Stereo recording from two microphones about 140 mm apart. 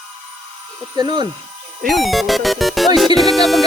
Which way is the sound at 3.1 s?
Centre (ahead or behind).